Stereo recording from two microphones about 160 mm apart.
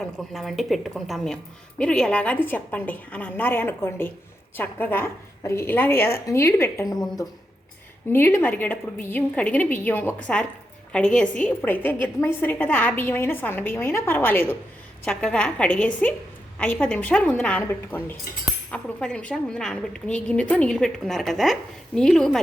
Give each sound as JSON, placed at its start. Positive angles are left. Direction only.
{"t": 0.2, "sound": "a woman's voice", "side_deg": 0}